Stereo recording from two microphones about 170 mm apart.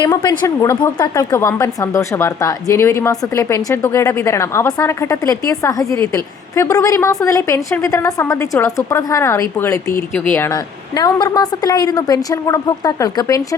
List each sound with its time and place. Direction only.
0.0 s a woman's voice: 25° left (ahead or behind)